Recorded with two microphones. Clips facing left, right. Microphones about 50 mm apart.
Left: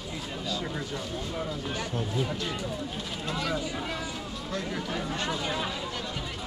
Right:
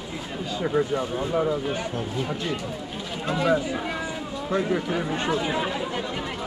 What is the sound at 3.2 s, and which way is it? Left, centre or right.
Speech, right.